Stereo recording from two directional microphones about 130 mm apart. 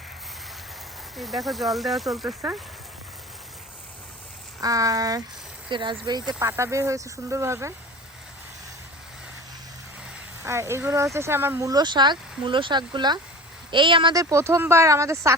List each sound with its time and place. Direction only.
1.1 s speech: centre (ahead or behind)
4.6 s speech: 25° right (ahead or behind)
6.4 s speech: 20° right (ahead or behind)
10.4 s speech: 20° right (ahead or behind)
11.7 s speech: 35° right (ahead or behind)
14.2 s speech: 25° right (ahead or behind)